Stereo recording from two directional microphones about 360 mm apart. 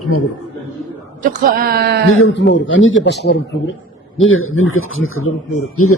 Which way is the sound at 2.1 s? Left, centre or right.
Left.